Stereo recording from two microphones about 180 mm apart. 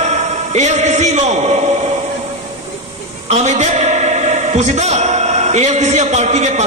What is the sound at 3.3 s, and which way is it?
A man's voice, 40° right (ahead or behind).